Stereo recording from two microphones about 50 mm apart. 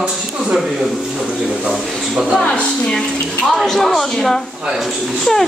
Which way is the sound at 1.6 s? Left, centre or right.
Centre.